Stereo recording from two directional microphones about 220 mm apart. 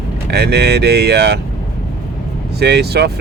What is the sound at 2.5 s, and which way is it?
Speech, 50° right (ahead or behind).